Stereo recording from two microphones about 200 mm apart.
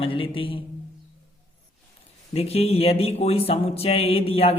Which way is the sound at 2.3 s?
30° left (ahead or behind).